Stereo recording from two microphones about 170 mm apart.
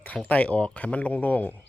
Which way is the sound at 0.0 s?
10° left (ahead or behind).